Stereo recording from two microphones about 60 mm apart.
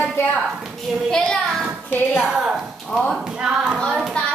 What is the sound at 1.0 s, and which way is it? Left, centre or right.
Speech, centre.